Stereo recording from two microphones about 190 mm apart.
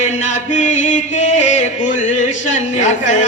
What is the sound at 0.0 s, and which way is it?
Music, 40° left (ahead or behind).